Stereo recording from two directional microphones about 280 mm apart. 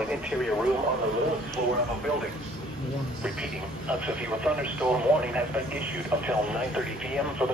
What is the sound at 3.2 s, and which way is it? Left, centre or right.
Speech, centre.